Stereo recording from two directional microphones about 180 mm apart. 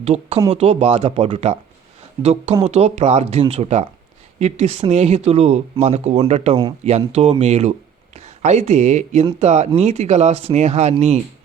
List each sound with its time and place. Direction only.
0.0 s speech: 35° right (ahead or behind)